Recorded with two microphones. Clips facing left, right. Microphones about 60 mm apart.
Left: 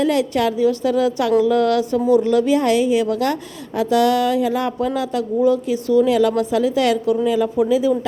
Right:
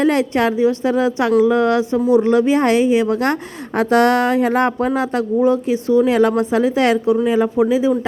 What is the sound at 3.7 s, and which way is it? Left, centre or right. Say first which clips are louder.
A woman's voice: right 2 dB; right.